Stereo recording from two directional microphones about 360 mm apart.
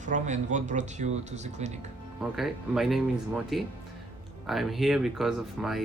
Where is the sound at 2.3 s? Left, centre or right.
Centre.